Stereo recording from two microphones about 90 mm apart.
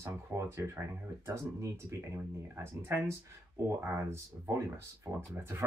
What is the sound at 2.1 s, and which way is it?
Speech, 30° right (ahead or behind).